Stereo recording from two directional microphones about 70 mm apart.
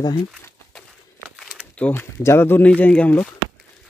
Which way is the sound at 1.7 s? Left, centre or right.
Centre.